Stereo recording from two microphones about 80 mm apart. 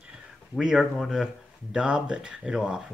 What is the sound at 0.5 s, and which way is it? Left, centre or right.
Speech, centre.